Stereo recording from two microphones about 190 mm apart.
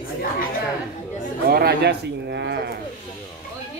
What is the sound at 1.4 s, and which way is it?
Speech, 55° right (ahead or behind).